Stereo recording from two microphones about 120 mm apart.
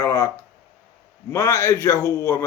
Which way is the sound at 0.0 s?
25° left (ahead or behind).